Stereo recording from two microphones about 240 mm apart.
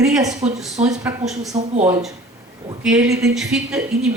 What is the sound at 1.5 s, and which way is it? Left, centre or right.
Speech, right.